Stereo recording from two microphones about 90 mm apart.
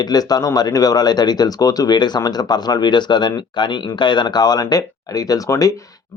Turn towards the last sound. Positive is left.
turn(degrees=40)  # may be behind; listen again after turning